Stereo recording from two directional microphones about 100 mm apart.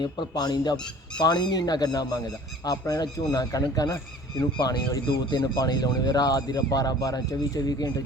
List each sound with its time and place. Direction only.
0.0 s speech: 45° left (ahead or behind)